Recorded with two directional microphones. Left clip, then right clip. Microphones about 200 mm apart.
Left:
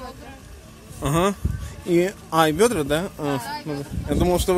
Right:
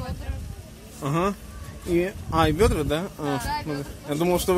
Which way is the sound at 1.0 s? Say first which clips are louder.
Left 4 dB; 25° left (ahead or behind).